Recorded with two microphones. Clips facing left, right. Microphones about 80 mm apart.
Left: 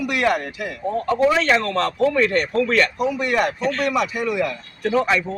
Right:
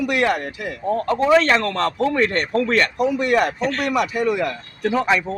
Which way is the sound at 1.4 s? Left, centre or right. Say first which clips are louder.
Even; right.